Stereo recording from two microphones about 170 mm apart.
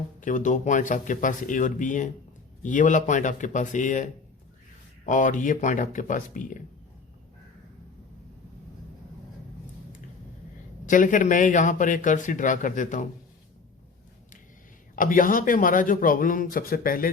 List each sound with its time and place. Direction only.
0.2 s a man's voice: 50° left (ahead or behind)
10.8 s a man's voice: 50° left (ahead or behind)
14.9 s a man's voice: 55° left (ahead or behind)